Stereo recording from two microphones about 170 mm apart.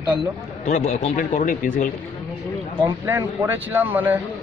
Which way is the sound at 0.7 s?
40° left (ahead or behind).